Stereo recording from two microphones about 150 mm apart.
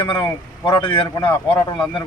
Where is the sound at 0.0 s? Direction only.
35° left (ahead or behind).